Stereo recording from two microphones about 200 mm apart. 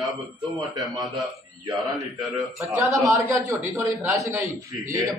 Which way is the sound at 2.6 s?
15° right (ahead or behind).